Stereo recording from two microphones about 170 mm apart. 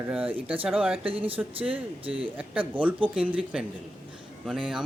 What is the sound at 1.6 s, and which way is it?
Speech, 10° right (ahead or behind).